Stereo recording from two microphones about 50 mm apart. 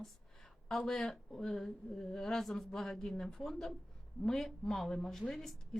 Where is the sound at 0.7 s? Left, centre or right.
Centre.